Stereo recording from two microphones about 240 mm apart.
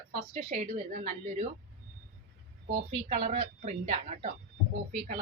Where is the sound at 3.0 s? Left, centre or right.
Right.